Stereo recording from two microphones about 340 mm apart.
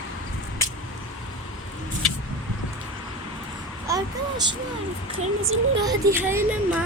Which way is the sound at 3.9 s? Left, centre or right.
Centre.